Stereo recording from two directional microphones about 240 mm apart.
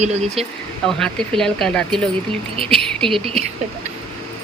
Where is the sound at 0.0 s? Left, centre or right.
Right.